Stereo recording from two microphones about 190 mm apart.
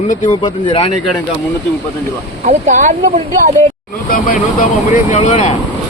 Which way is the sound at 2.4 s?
40° right (ahead or behind).